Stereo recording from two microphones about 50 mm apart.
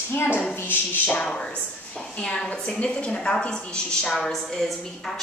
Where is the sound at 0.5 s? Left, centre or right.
Left.